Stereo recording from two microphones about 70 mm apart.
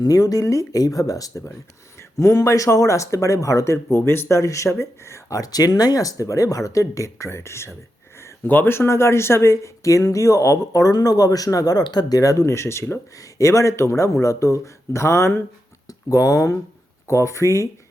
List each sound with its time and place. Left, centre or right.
0.0 s speech: left
4.4 s speech: left
5.4 s speech: left
8.4 s speech: left
13.1 s speech: left
15.9 s speech: left
17.1 s speech: left